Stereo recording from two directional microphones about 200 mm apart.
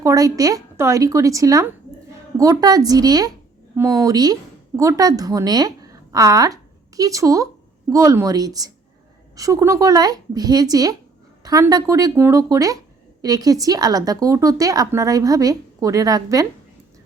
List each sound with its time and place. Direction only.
0.0 s a woman's voice: 15° right (ahead or behind)